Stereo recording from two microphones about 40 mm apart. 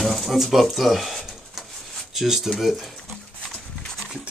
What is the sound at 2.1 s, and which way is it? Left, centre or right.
Speech, centre.